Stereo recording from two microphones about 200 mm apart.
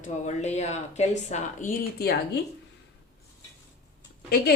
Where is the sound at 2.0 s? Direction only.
50° left (ahead or behind).